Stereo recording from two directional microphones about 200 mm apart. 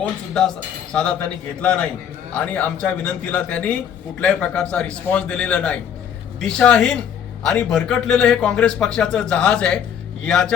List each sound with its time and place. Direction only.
0.0 s a man's voice: 5° left (ahead or behind)